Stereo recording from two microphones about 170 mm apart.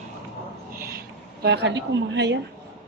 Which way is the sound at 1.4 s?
85° right.